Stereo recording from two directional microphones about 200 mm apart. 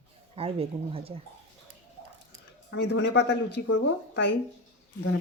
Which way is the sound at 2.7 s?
60° left (ahead or behind).